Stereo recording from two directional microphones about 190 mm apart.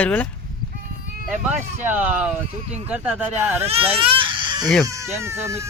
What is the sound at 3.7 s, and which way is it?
Speech, 30° right (ahead or behind).